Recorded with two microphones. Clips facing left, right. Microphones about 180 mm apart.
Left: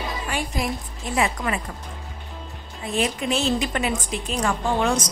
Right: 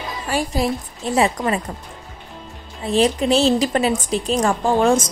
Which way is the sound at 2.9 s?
30° right (ahead or behind).